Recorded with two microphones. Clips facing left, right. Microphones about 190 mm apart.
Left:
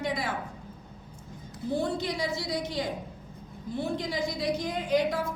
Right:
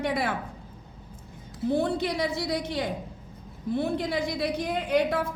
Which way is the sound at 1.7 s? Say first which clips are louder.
Right 3 dB; 60° right (ahead or behind).